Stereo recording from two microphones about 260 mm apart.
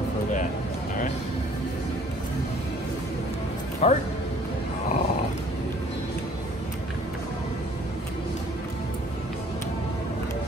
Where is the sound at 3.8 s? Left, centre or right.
Left.